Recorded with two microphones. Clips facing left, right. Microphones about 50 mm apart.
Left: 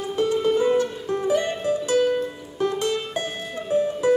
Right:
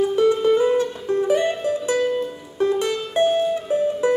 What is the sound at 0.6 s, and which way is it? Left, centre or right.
Music, right.